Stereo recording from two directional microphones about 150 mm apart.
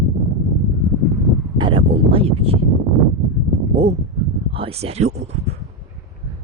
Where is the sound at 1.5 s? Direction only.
30° right (ahead or behind).